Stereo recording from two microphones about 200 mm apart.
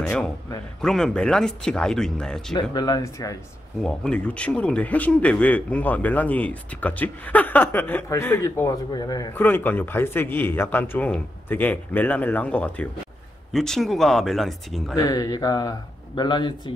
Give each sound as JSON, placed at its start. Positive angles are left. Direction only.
{"t": 0.7, "sound": "speech", "side_deg": 0}
{"t": 2.5, "sound": "speech", "side_deg": 20}
{"t": 3.8, "sound": "speech", "side_deg": 5}
{"t": 15.0, "sound": "speech", "side_deg": 20}